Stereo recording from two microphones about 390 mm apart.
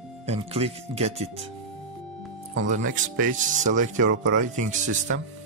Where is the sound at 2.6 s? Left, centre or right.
Centre.